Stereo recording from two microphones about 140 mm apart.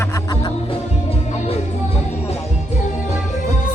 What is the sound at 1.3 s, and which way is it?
Music, 50° left (ahead or behind).